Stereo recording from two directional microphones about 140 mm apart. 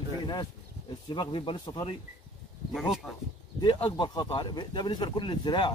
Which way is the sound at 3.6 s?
30° left (ahead or behind).